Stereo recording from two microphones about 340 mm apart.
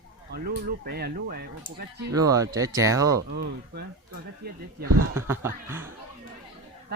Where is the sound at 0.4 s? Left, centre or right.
Right.